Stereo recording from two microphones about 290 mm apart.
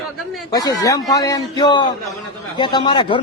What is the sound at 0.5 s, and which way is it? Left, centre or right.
A man's voice, centre.